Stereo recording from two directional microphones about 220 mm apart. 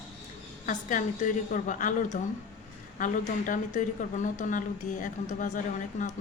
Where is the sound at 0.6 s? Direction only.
35° left (ahead or behind).